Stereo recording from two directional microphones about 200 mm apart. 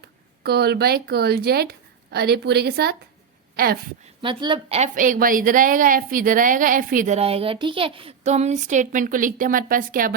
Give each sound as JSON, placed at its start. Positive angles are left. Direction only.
{"t": 0.4, "sound": "a woman's voice", "side_deg": -55}
{"t": 4.2, "sound": "a woman's voice", "side_deg": -25}